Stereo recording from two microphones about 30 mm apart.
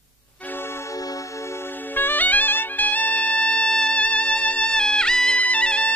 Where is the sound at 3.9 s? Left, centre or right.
Left.